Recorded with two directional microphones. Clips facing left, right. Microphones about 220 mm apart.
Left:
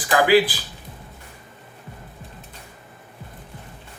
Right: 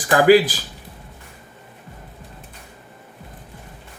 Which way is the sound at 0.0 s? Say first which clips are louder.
Right 4 dB; 45° right (ahead or behind).